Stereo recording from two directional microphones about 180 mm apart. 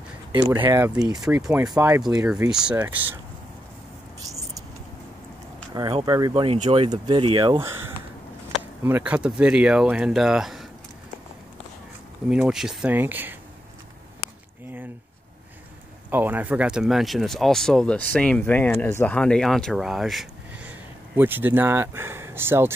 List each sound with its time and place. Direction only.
0.5 s speech: 15° right (ahead or behind)
1.1 s speech: 5° right (ahead or behind)
1.7 s speech: 15° right (ahead or behind)
2.0 s speech: 5° right (ahead or behind)
6.0 s speech: 20° right (ahead or behind)
8.8 s speech: 10° right (ahead or behind)
12.3 s speech: 5° right (ahead or behind)
16.1 s speech: 10° right (ahead or behind)